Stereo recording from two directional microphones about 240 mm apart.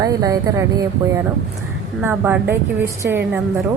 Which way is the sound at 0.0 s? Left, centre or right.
Centre.